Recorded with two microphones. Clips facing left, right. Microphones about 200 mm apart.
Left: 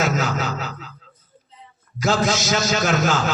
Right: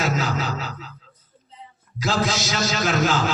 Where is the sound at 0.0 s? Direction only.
45° left (ahead or behind).